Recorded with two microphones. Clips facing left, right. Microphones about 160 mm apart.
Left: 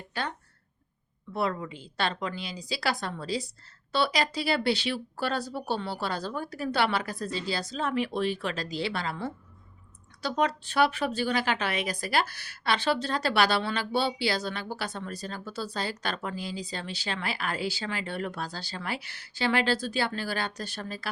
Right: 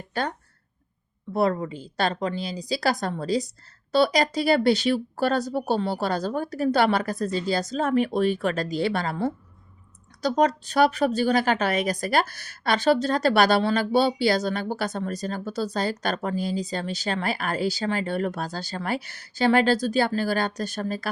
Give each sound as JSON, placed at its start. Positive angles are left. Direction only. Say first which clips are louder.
{"t": 0.1, "sound": "a woman's voice", "louder": "right 6 dB", "side_deg": -45}